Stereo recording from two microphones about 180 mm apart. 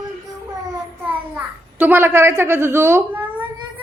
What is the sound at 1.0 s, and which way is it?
A child's voice, 10° right (ahead or behind).